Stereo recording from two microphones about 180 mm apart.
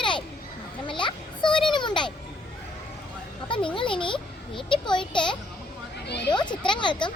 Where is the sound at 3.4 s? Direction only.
30° left (ahead or behind).